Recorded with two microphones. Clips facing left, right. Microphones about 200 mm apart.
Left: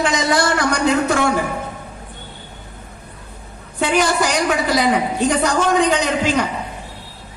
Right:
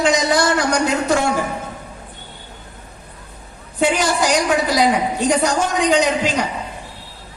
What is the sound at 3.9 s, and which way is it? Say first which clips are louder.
Speech: left 4 dB; 55° left (ahead or behind).